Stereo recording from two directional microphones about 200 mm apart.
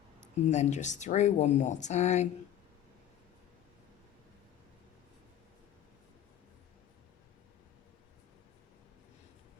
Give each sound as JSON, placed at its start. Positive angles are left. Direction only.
{"t": 0.3, "sound": "speech", "side_deg": 35}